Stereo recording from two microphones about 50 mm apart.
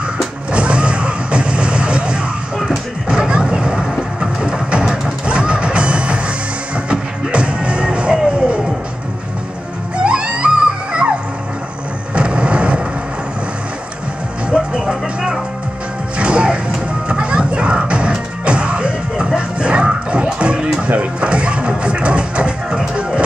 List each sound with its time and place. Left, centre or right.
0.5 s vehicle: right
4.2 s music: centre
10.0 s music: right
12.1 s vehicle: right
14.5 s music: centre